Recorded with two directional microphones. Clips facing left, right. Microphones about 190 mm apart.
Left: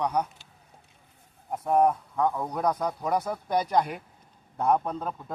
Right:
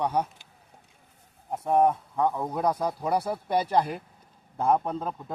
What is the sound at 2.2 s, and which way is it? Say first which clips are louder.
Speech: right 1 dB; centre (ahead or behind).